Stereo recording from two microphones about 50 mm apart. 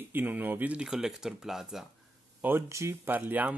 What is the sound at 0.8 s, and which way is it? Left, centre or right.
Speech, centre.